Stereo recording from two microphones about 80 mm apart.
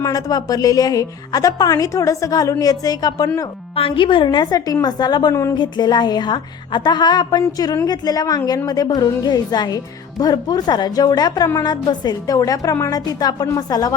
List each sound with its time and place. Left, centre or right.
0.0 s a woman's voice: left
3.9 s a woman's voice: left
4.5 s speech: left
5.3 s a woman's voice: left
5.5 s a woman's voice: left